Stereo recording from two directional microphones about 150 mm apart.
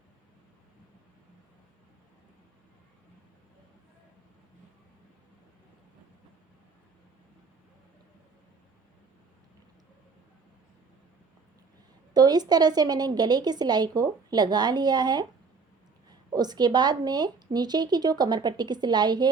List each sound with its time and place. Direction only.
12.1 s speech: 25° right (ahead or behind)